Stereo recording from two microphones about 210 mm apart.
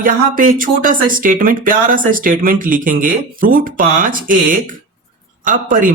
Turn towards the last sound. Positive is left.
turn(degrees=-40)  # may be behind; listen again after turning